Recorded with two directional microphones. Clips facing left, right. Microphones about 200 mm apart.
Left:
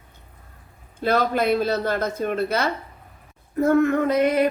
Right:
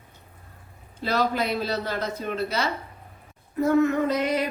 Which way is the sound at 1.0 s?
55° left (ahead or behind).